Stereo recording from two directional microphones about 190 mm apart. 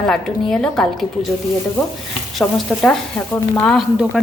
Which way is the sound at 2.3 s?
Centre (ahead or behind).